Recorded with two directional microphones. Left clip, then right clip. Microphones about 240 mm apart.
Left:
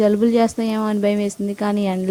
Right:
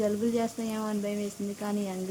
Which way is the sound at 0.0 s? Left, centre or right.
Left.